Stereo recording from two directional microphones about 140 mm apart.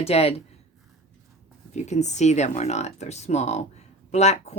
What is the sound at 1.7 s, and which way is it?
Speech, 55° left (ahead or behind).